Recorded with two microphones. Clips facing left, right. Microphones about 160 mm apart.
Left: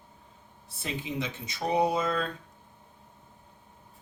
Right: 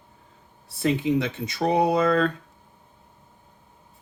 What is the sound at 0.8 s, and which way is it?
Speech, 75° right (ahead or behind).